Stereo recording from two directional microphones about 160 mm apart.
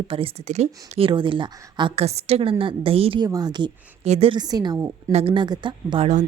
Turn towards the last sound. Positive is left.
turn(degrees=-30)  # may be behind; listen again after turning